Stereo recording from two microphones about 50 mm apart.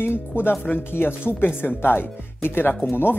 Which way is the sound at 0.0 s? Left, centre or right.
Left.